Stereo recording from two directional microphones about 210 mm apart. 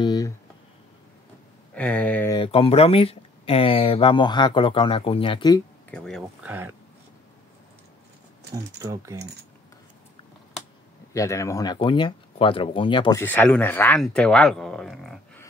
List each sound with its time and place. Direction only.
0.0 s a sound: 20° left (ahead or behind)
1.8 s a sound: 5° left (ahead or behind)
2.3 s speech: 25° left (ahead or behind)
5.9 s speech: 5° left (ahead or behind)
6.4 s speech: 10° right (ahead or behind)
8.7 s speech: 15° right (ahead or behind)
11.1 s speech: 15° left (ahead or behind)
13.2 s speech: 10° left (ahead or behind)